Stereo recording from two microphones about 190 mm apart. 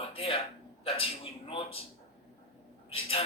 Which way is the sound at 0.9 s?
30° left (ahead or behind).